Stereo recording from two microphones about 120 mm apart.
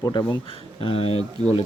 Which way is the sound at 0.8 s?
55° left (ahead or behind).